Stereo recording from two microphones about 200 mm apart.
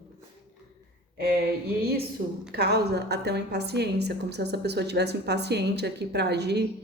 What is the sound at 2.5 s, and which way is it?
A woman's voice, 55° right (ahead or behind).